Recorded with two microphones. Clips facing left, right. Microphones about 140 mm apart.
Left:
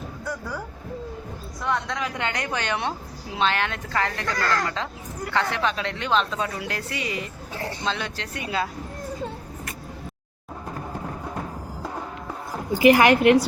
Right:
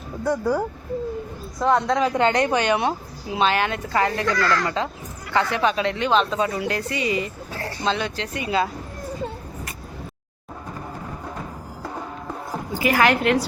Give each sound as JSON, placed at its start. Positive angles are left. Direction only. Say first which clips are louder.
{"t": 0.3, "sound": "speech", "louder": "right 12 dB", "side_deg": -35}
{"t": 2.5, "sound": "speech", "louder": "right 7 dB", "side_deg": -15}
{"t": 4.4, "sound": "speech", "louder": "even", "side_deg": 45}
{"t": 5.3, "sound": "speech", "louder": "right 4 dB", "side_deg": -5}
{"t": 7.5, "sound": "speech", "louder": "left 3 dB", "side_deg": 15}
{"t": 7.9, "sound": "speech", "louder": "right 8 dB", "side_deg": 0}
{"t": 12.9, "sound": "a woman's voice", "louder": "left 3 dB", "side_deg": 15}